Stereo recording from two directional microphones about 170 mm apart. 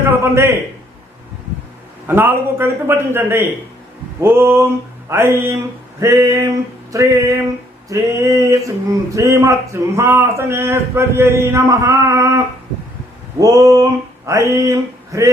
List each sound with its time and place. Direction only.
0.1 s speech: 15° right (ahead or behind)
2.0 s speech: 15° right (ahead or behind)
6.9 s a sound: 20° right (ahead or behind)
7.9 s speech: 15° right (ahead or behind)
13.4 s a sound: 20° right (ahead or behind)
14.3 s speech: 20° right (ahead or behind)